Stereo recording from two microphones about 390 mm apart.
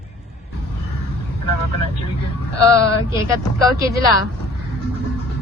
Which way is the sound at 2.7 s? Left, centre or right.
Left.